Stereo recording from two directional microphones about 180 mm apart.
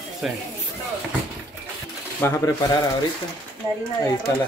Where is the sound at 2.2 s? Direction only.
15° left (ahead or behind).